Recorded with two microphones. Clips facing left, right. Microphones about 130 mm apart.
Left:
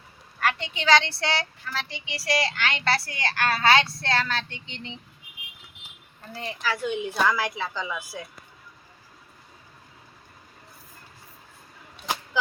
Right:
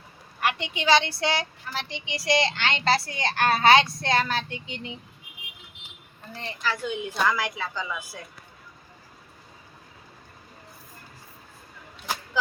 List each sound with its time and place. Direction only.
0.3 s speech: 15° right (ahead or behind)
6.3 s a woman's voice: 5° left (ahead or behind)